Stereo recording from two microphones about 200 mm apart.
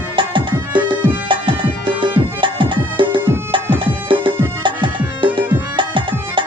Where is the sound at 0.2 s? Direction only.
25° right (ahead or behind).